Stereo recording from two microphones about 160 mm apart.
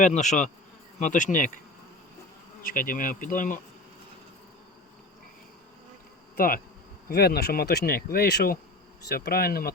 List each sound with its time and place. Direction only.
0.0 s bee: 45° left (ahead or behind)
2.6 s speech: 60° left (ahead or behind)
6.3 s insect: 65° left (ahead or behind)
7.1 s speech: 75° left (ahead or behind)